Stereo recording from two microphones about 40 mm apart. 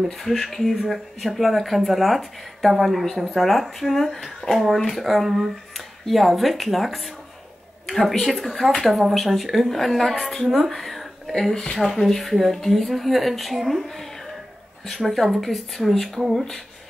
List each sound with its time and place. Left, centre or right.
0.2 s speech: centre
11.5 s speech: centre
11.8 s speech: centre
15.0 s speech: centre
16.2 s speech: centre